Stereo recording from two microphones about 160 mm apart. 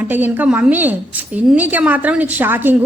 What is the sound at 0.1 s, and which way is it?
A woman's voice, 10° right (ahead or behind).